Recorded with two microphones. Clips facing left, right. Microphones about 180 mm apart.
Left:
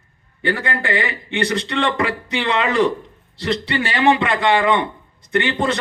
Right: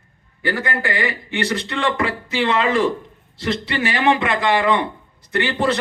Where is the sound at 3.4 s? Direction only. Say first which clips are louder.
Left 1 dB; 30° left (ahead or behind).